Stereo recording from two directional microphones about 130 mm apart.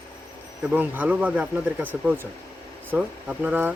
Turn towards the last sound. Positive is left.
turn(degrees=-10)  # may be behind; listen again after turning